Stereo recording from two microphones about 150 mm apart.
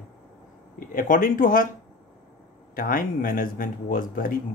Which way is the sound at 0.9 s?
65° left (ahead or behind).